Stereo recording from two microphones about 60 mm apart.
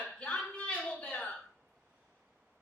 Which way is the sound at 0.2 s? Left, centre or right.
Left.